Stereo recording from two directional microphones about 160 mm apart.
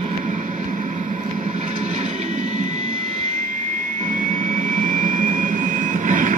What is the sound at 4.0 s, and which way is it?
Jet engine, 55° right (ahead or behind).